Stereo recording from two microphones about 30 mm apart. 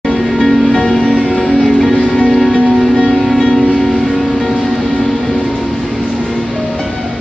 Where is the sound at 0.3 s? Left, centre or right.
Centre.